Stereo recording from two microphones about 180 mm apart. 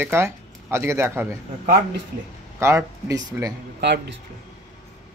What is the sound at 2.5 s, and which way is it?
Speech, 15° right (ahead or behind).